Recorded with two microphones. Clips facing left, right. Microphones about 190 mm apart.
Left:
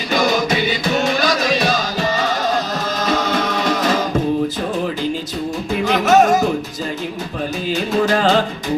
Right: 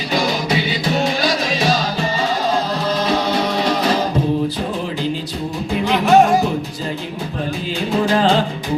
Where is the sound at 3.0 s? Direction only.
45° left (ahead or behind).